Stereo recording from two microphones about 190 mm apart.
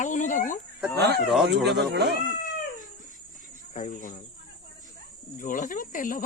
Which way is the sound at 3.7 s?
40° left (ahead or behind).